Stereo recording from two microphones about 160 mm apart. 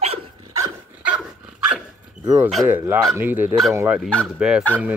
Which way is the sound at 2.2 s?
15° right (ahead or behind).